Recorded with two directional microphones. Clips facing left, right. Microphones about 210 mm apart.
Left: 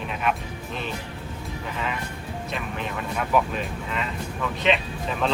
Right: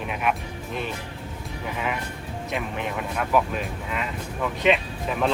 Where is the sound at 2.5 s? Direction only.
15° right (ahead or behind).